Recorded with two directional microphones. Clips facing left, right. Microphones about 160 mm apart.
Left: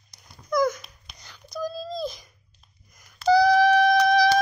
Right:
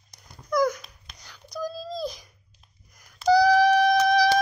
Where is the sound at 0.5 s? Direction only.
10° right (ahead or behind).